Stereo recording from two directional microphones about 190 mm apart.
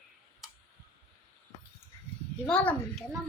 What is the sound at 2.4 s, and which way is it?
Speech, 5° left (ahead or behind).